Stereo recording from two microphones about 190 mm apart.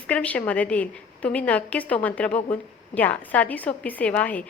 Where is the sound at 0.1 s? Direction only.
5° left (ahead or behind).